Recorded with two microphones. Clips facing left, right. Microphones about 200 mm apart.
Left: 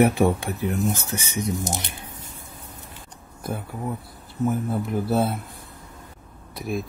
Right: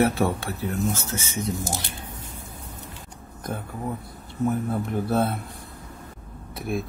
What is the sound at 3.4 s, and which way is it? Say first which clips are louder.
Speech: left 1 dB; 5° left (ahead or behind).